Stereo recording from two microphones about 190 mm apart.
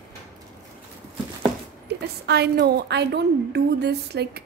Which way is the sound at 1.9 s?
60° right (ahead or behind).